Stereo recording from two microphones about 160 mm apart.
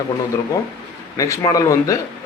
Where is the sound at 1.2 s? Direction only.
20° left (ahead or behind).